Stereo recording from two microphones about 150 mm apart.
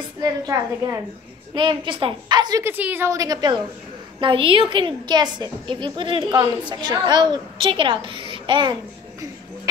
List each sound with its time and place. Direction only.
0.2 s a woman's voice: 20° right (ahead or behind)
2.6 s a woman's voice: 15° right (ahead or behind); by 8.7 s 30° right (ahead or behind)